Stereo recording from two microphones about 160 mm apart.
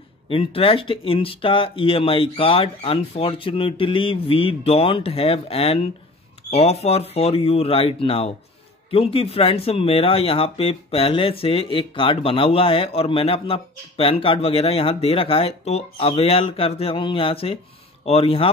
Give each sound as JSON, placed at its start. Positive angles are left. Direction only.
{"t": 0.3, "sound": "speech", "side_deg": 35}